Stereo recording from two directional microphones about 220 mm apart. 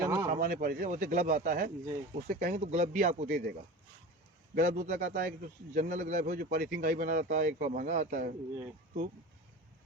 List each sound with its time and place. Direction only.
0.0 s a sound: 15° right (ahead or behind)
0.3 s speech: 40° right (ahead or behind)
4.5 s speech: 35° right (ahead or behind)